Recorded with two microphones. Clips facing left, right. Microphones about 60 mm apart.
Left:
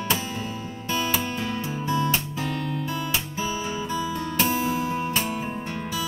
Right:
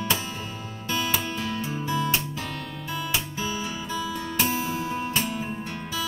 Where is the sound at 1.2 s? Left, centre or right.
Left.